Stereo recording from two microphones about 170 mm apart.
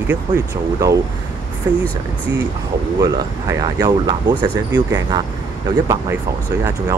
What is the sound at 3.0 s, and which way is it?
Speech, 20° right (ahead or behind).